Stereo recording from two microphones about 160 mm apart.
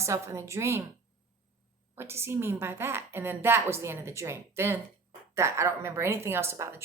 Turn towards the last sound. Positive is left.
turn(degrees=-15)  # may be behind; listen again after turning